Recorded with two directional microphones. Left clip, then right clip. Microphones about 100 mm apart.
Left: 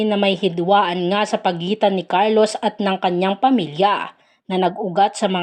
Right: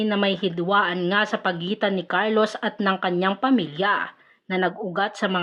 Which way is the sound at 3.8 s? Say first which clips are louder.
Left 5 dB; 40° left (ahead or behind).